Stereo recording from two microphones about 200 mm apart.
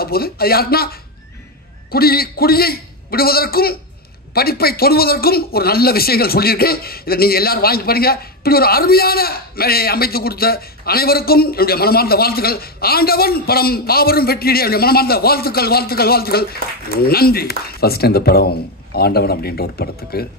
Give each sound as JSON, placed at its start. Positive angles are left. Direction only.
{"t": 0.0, "sound": "a man's voice", "side_deg": 50}